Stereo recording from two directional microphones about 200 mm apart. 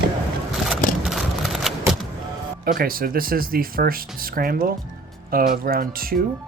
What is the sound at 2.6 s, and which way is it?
Speech, 45° right (ahead or behind).